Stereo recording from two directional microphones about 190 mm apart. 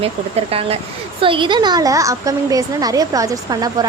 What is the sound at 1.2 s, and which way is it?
A woman's voice, 25° right (ahead or behind).